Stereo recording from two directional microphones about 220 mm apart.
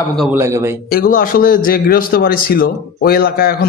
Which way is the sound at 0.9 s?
40° left (ahead or behind).